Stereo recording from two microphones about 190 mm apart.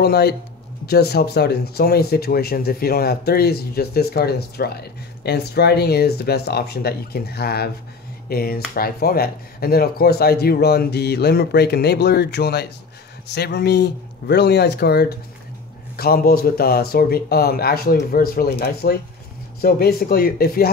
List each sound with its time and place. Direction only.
0.0 s speech: 55° left (ahead or behind)